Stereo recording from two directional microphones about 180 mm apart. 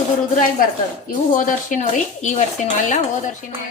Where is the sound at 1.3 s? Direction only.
45° left (ahead or behind).